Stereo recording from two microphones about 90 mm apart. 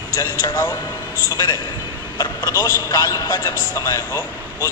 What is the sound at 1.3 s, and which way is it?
Speech, 50° left (ahead or behind).